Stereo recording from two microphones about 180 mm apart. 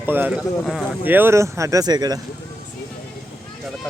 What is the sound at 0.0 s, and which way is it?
Speech, 10° right (ahead or behind).